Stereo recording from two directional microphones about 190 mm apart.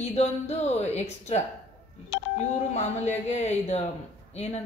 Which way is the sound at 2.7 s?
35° left (ahead or behind).